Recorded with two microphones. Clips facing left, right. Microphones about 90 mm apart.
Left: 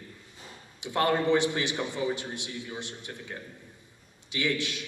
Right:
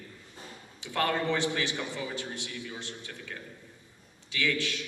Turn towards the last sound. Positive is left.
turn(degrees=20)  # may be behind; listen again after turning